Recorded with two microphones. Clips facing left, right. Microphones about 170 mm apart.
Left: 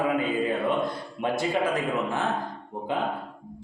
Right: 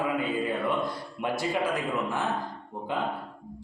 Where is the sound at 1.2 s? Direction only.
20° left (ahead or behind).